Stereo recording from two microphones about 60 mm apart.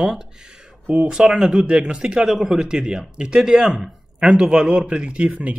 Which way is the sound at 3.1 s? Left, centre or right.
Centre.